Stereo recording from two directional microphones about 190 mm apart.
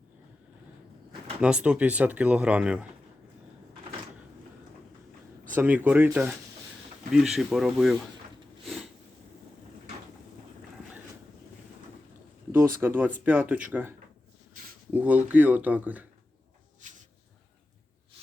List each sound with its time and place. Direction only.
1.4 s speech: 5° right (ahead or behind)
5.5 s speech: 10° right (ahead or behind)
12.8 s speech: 10° right (ahead or behind)
16.8 s a sound: 40° right (ahead or behind)